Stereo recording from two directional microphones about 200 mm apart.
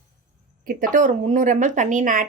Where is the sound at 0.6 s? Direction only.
45° right (ahead or behind).